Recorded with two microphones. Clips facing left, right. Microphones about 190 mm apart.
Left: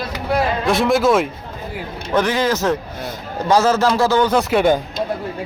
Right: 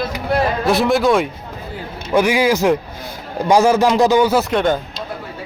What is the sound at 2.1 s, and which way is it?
A man's voice, 10° right (ahead or behind).